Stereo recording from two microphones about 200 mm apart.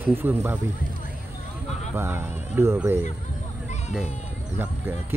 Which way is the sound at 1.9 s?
10° right (ahead or behind).